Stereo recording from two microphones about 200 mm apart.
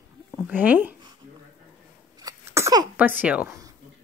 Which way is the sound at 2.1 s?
15° right (ahead or behind).